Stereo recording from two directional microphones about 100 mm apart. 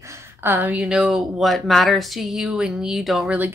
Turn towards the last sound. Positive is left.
turn(degrees=0)  # may be behind; listen again after turning